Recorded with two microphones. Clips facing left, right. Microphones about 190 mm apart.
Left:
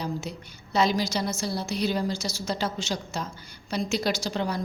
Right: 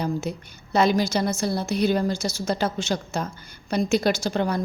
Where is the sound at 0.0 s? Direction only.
55° right (ahead or behind).